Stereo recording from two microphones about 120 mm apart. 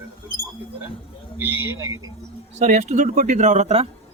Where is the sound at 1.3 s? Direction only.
15° right (ahead or behind).